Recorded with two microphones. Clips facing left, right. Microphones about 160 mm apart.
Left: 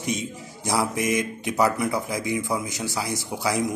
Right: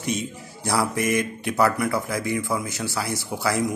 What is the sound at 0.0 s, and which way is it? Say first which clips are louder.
A man's voice: right 1 dB; 15° left (ahead or behind).